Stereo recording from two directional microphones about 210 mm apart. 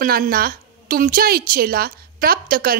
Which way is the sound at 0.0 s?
45° right (ahead or behind).